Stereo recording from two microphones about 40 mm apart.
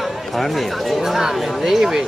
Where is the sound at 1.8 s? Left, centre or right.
Centre.